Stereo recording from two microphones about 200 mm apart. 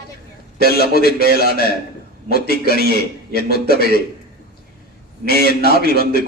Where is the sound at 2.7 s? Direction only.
50° right (ahead or behind).